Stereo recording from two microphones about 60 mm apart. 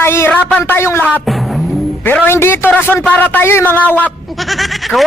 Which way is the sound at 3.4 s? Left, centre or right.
Left.